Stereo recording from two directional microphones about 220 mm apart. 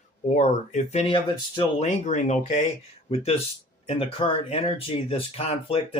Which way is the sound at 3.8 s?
25° left (ahead or behind).